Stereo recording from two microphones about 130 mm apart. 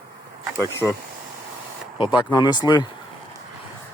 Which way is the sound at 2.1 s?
35° left (ahead or behind).